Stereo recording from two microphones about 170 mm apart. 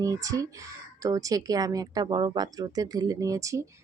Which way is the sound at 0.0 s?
20° right (ahead or behind).